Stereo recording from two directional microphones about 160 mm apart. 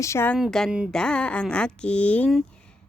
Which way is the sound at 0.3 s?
Centre (ahead or behind).